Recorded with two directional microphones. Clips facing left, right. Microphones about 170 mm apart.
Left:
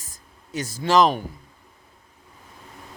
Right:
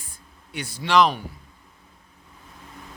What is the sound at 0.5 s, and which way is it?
Speech, 45° left (ahead or behind).